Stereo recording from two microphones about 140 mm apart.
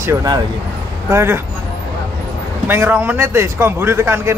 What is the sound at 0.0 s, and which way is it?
A man's voice, 25° right (ahead or behind).